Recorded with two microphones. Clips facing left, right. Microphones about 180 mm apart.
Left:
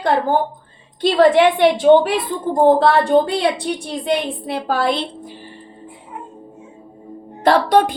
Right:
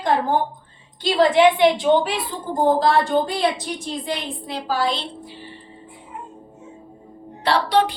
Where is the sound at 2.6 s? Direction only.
65° left (ahead or behind).